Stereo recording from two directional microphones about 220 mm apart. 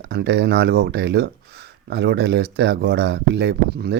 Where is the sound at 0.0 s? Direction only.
50° right (ahead or behind).